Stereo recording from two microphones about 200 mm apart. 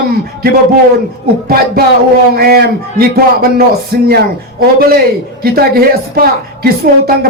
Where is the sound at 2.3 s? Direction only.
50° right (ahead or behind).